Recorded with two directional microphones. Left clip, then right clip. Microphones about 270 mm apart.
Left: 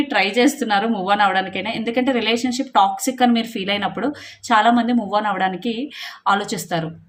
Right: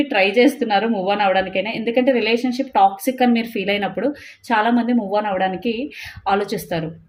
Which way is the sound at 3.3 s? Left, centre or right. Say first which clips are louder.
Right 1 dB; left.